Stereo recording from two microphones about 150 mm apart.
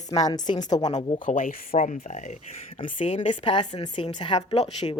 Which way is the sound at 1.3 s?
65° left (ahead or behind).